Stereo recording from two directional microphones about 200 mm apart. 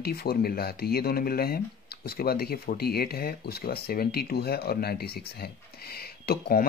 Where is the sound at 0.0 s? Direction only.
50° left (ahead or behind).